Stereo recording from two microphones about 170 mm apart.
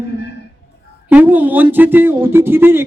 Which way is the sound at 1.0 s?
10° right (ahead or behind).